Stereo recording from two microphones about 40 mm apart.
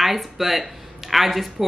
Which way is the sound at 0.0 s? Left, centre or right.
Centre.